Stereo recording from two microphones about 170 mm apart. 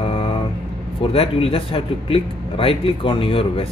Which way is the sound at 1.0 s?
35° left (ahead or behind).